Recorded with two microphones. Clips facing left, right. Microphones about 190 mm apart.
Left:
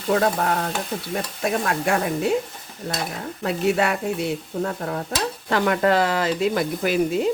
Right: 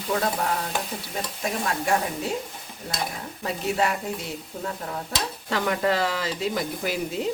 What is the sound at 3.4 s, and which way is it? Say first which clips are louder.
Speech: left 4 dB; 65° left (ahead or behind).